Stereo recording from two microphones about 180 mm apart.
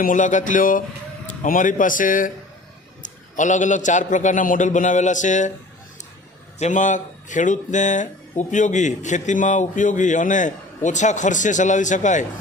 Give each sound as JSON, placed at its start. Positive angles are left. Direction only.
{"t": 0.0, "sound": "speech", "side_deg": 45}
{"t": 6.6, "sound": "speech", "side_deg": 45}